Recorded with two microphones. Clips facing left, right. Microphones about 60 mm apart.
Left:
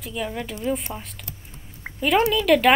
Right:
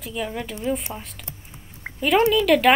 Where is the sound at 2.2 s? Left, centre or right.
Centre.